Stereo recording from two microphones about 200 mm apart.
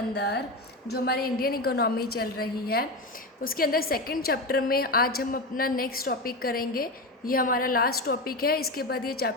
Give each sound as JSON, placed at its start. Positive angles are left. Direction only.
{"t": 0.1, "sound": "a woman's voice", "side_deg": 55}